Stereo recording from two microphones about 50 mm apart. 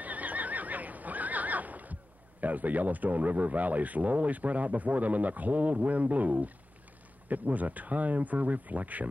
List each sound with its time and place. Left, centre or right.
0.0 s neigh: right
2.4 s speech: right